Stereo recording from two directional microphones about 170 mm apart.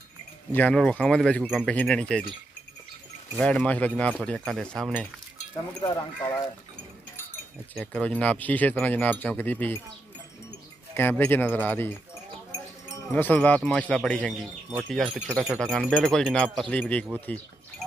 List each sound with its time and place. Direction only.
0.5 s speech: 10° left (ahead or behind)
1.7 s speech: 5° left (ahead or behind)
3.3 s speech: 5° left (ahead or behind)
5.8 s speech: 20° left (ahead or behind)
7.7 s speech: 10° left (ahead or behind)
11.0 s speech: 10° left (ahead or behind)
13.1 s speech: 10° left (ahead or behind)